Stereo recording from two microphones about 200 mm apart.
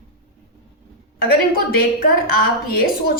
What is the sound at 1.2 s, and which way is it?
A woman's voice, 50° left (ahead or behind).